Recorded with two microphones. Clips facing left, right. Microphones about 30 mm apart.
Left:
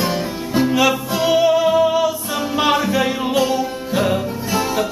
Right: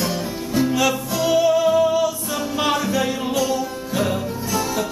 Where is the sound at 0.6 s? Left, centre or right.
Left.